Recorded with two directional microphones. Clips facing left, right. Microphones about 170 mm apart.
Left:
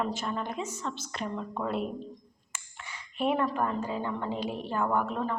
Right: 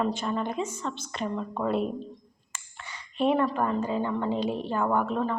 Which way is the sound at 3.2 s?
5° left (ahead or behind).